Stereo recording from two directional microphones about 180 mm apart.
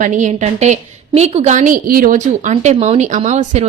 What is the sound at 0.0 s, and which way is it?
A woman's voice, 45° right (ahead or behind).